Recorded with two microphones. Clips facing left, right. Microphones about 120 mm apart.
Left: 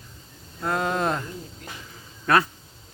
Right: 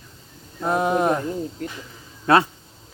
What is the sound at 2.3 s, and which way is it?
Speech, 25° right (ahead or behind).